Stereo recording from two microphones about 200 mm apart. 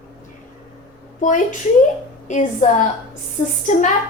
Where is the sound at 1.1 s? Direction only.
40° left (ahead or behind).